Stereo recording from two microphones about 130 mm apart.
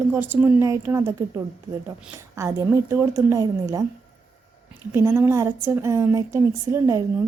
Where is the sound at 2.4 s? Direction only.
25° right (ahead or behind).